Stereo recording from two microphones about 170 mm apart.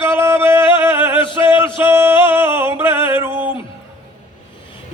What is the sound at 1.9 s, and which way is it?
Music, 15° right (ahead or behind).